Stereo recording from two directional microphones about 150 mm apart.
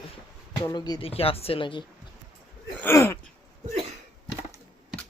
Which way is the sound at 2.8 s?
15° left (ahead or behind).